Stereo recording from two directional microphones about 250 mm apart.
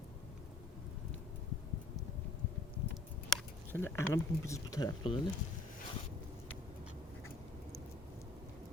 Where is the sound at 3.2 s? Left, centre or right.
Centre.